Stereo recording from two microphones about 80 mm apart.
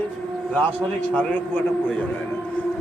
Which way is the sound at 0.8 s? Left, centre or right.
Centre.